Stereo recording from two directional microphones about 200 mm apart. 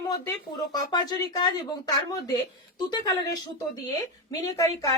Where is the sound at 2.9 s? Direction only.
20° left (ahead or behind).